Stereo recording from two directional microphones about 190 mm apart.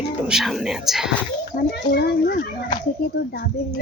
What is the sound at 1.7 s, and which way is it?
A child's voice, 55° left (ahead or behind).